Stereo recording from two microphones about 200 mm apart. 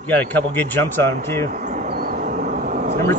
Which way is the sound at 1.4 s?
40° right (ahead or behind).